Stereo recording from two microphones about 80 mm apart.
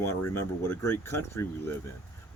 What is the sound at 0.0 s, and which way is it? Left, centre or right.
Speech, left.